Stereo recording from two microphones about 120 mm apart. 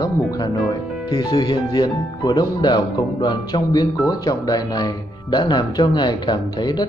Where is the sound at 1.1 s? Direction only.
30° left (ahead or behind).